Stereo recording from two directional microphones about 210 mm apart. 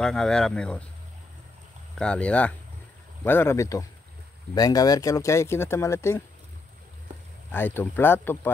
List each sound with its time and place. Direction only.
0.0 s speech: 5° left (ahead or behind)
2.0 s speech: 5° left (ahead or behind)
7.5 s speech: 10° left (ahead or behind)